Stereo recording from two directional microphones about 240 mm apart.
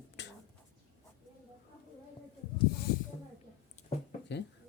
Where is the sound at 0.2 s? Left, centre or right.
Left.